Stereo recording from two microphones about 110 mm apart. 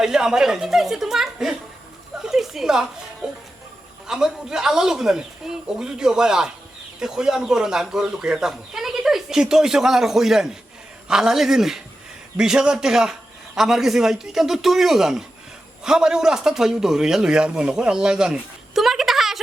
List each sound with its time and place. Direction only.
0.0 s speech: 5° right (ahead or behind)
2.2 s a sound: 5° right (ahead or behind)
4.0 s speech: 5° right (ahead or behind)